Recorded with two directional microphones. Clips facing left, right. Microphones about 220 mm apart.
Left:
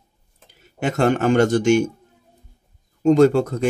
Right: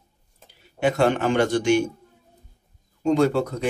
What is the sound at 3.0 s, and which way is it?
Speech, 45° left (ahead or behind).